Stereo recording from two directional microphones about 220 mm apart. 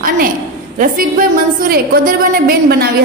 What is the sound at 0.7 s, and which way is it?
A woman's voice, 40° right (ahead or behind).